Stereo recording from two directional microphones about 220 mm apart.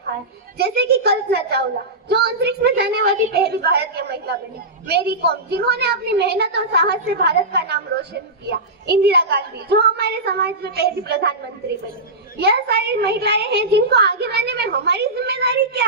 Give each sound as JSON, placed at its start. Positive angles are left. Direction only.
{"t": 0.1, "sound": "a woman's voice", "side_deg": -45}
{"t": 12.4, "sound": "a woman's voice", "side_deg": -45}